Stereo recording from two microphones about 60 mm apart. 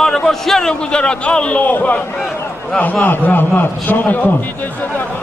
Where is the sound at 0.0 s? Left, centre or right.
Centre; by 4.3 s left.